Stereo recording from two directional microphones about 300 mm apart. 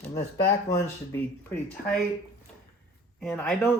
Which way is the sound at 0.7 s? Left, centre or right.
Centre.